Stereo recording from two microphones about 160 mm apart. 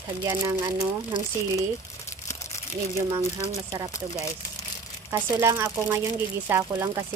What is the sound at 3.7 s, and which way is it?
Speech, 20° right (ahead or behind).